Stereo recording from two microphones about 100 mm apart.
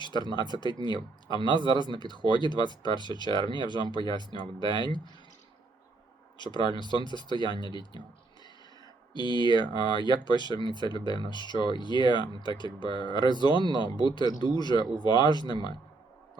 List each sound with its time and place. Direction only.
0.0 s speech: 50° left (ahead or behind)
6.4 s speech: 50° left (ahead or behind)
9.1 s speech: 50° left (ahead or behind)